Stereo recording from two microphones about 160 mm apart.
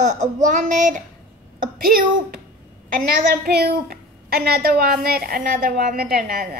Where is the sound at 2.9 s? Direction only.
75° right (ahead or behind).